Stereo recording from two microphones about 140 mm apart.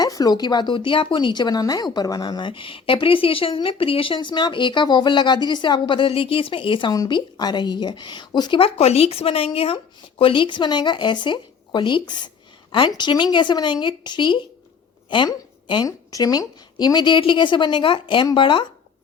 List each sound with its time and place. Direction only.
0.0 s speech: 25° left (ahead or behind)